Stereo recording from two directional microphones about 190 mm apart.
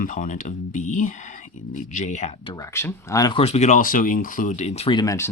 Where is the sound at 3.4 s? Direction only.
35° left (ahead or behind).